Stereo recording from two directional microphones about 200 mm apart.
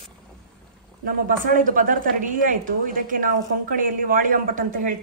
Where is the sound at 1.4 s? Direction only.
45° right (ahead or behind).